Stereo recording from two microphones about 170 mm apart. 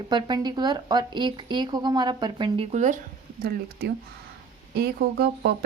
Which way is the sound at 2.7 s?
45° right (ahead or behind).